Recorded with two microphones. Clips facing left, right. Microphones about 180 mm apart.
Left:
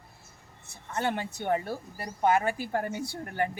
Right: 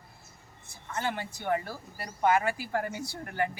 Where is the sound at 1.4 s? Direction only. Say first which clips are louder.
Left 1 dB; 25° left (ahead or behind).